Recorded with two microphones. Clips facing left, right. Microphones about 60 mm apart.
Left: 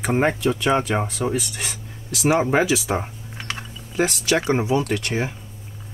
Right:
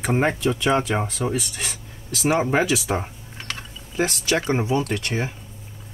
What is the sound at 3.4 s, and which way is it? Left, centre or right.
Typing, centre.